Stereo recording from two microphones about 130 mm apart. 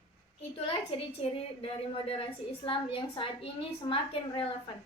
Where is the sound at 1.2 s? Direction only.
45° left (ahead or behind).